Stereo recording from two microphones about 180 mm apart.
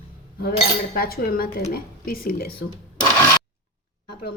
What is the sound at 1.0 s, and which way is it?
A woman's voice, 55° left (ahead or behind).